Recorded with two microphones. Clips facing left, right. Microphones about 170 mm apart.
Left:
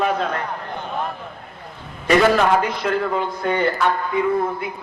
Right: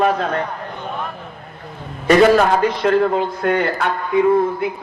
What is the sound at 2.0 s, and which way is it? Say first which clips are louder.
A man's voice: right 4 dB; 45° right (ahead or behind).